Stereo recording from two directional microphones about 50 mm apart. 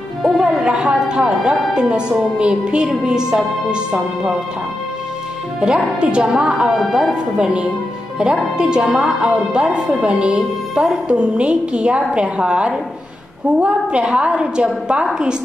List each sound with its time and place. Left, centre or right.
0.2 s music: centre
1.7 s a woman's voice: centre
5.9 s a woman's voice: centre
6.8 s speech: centre
7.3 s a woman's voice: centre
10.0 s a woman's voice: right